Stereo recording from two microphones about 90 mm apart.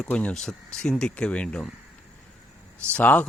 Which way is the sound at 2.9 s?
20° left (ahead or behind).